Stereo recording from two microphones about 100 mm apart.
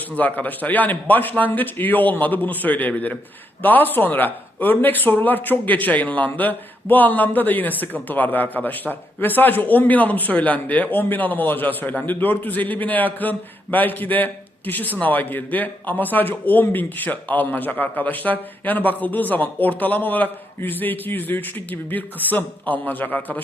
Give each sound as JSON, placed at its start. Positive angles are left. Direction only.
{"t": 0.2, "sound": "speech", "side_deg": 15}